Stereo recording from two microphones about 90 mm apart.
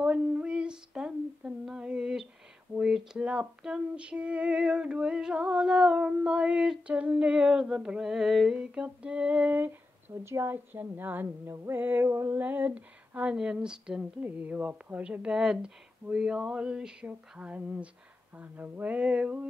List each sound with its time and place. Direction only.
0.0 s a sound: 15° right (ahead or behind)
2.7 s female singing: 5° right (ahead or behind)
10.1 s a woman's voice: 30° right (ahead or behind)
12.4 s female singing: 20° right (ahead or behind)